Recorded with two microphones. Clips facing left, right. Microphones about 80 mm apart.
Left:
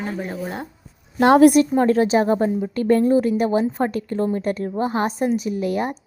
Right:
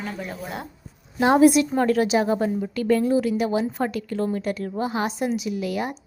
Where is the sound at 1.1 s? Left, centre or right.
Left.